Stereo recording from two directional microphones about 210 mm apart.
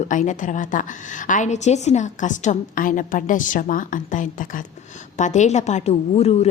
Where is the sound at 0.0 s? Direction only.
35° left (ahead or behind).